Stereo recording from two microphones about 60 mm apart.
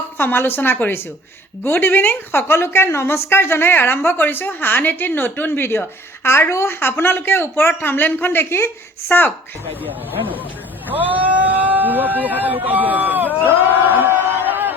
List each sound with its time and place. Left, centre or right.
0.2 s a woman's voice: left
9.8 s speech: right
10.8 s a sound: right